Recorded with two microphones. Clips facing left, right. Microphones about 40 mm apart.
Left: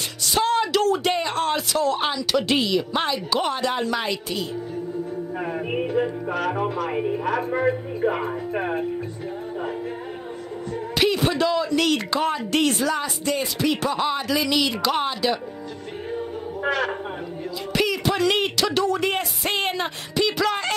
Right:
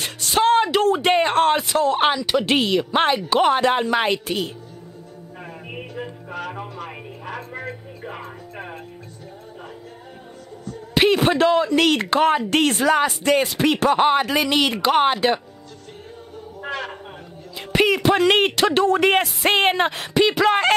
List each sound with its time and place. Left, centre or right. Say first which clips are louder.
0.0 s music: right 4 dB; right
1.1 s speech: right 6 dB; right
1.6 s music: right 4 dB; right
2.9 s speech: right 5 dB; right
5.4 s music: left 8 dB; left
8.3 s music: left 9 dB; left
11.1 s speech: right 6 dB; right
13.6 s speech: right 5 dB; right
16.6 s speech: left 5 dB; left
17.7 s speech: right 5 dB; right
18.9 s music: right 6 dB; right
19.7 s speech: right 6 dB; right
20.3 s music: right 6 dB; right